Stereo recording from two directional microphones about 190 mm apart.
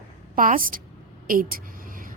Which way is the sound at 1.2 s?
45° right (ahead or behind).